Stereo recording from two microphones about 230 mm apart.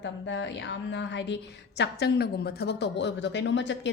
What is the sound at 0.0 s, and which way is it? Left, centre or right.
Speech, left.